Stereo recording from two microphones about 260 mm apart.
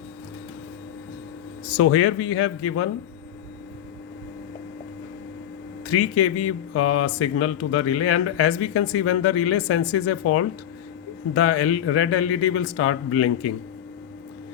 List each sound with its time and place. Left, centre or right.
1.7 s speech: left
5.8 s speech: left